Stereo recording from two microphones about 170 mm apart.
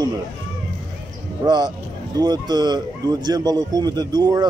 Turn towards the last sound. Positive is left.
turn(degrees=-25)  # may be behind; listen again after turning